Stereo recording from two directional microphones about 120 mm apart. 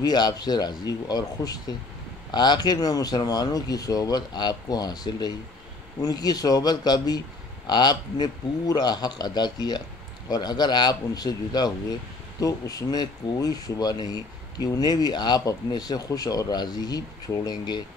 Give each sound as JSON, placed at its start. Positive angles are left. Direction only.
{"t": 0.0, "sound": "speech", "side_deg": 35}